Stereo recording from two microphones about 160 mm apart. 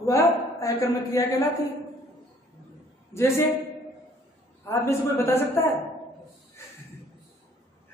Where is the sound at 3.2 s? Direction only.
15° left (ahead or behind).